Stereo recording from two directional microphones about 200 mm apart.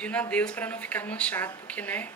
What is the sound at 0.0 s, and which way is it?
Speech, 5° left (ahead or behind).